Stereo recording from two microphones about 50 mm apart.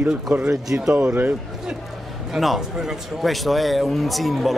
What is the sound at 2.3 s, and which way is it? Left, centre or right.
A man's voice, centre.